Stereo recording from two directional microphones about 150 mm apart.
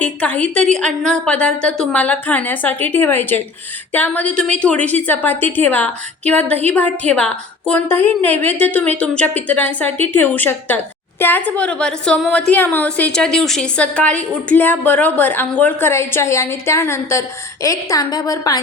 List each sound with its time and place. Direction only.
0.0 s a woman's voice: 10° left (ahead or behind); by 18.6 s 25° left (ahead or behind)